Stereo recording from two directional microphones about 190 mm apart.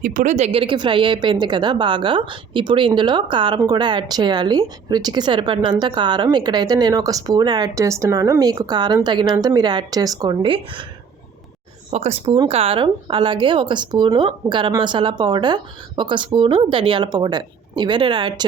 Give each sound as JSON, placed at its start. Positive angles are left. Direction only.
{"t": 0.0, "sound": "a woman's voice", "side_deg": -45}
{"t": 11.9, "sound": "a woman's voice", "side_deg": -35}